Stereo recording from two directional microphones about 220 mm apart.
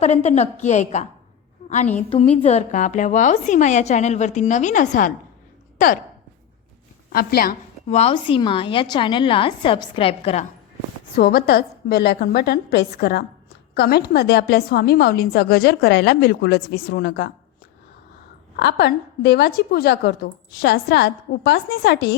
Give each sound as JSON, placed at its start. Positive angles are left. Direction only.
{"t": 0.0, "sound": "a woman's voice", "side_deg": 30}
{"t": 2.0, "sound": "a woman's voice", "side_deg": 25}
{"t": 7.1, "sound": "a woman's voice", "side_deg": 45}
{"t": 7.9, "sound": "a woman's voice", "side_deg": 30}
{"t": 11.2, "sound": "a woman's voice", "side_deg": 45}
{"t": 18.5, "sound": "a woman's voice", "side_deg": 50}